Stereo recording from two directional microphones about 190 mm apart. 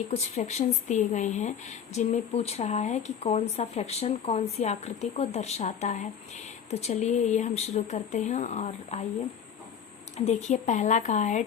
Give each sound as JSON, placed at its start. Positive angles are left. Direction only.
{"t": 0.1, "sound": "speech", "side_deg": 35}
{"t": 10.2, "sound": "speech", "side_deg": 35}